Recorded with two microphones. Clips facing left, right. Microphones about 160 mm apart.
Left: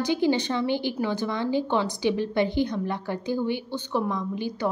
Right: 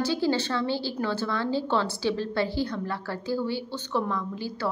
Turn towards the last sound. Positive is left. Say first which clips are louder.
# left 3 dB
turn(degrees=20)  # may be behind; listen again after turning